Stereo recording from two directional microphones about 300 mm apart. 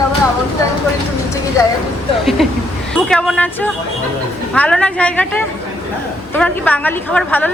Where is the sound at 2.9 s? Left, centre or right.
Centre.